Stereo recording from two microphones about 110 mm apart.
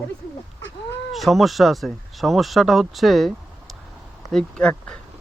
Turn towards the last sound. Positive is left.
turn(degrees=10)  # may be behind; listen again after turning